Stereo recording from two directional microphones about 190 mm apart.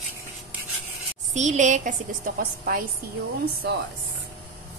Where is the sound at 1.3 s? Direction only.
40° right (ahead or behind).